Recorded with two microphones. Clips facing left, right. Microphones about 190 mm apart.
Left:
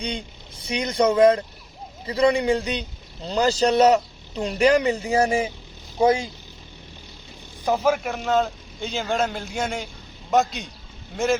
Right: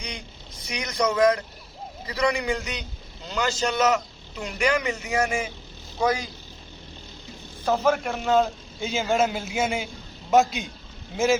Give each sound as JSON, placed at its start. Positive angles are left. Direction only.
{"t": 0.0, "sound": "a man's voice", "side_deg": 30}
{"t": 7.6, "sound": "a man's voice", "side_deg": 15}